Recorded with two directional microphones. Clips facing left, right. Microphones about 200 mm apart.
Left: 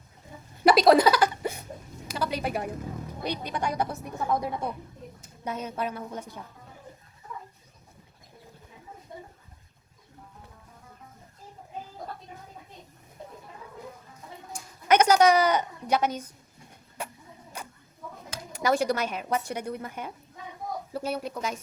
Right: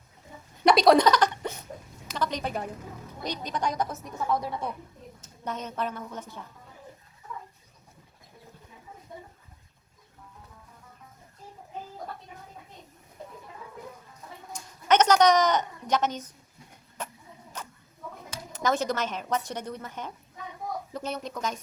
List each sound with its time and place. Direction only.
0.6 s chuckle: 5° left (ahead or behind)
2.0 s a woman's voice: 10° left (ahead or behind)
14.5 s a sound: 10° left (ahead or behind)
18.5 s speech: 10° left (ahead or behind)